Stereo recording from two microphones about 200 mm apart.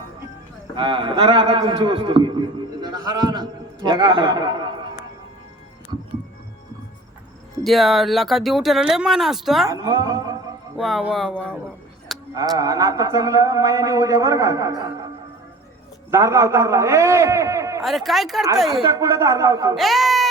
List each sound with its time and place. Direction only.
0.8 s a man's voice: 25° right (ahead or behind)
7.6 s speech: centre (ahead or behind)
9.6 s a man's voice: 20° right (ahead or behind)
10.8 s speech: centre (ahead or behind)
12.3 s speech: 20° right (ahead or behind)
16.1 s speech: 15° right (ahead or behind)
17.8 s speech: centre (ahead or behind)
18.7 s speech: 20° right (ahead or behind)
19.7 s a child's voice: centre (ahead or behind)